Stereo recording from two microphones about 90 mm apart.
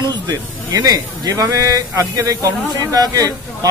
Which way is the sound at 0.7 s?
45° right (ahead or behind).